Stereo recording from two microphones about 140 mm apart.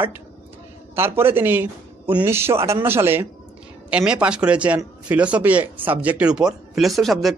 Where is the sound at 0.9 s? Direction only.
15° right (ahead or behind).